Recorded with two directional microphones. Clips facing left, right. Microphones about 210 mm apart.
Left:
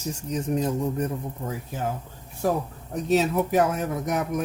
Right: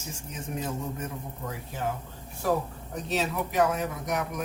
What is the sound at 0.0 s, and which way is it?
Speech, 40° left (ahead or behind).